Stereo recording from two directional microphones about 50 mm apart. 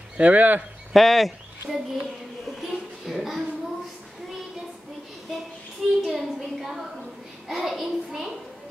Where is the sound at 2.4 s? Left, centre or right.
Centre.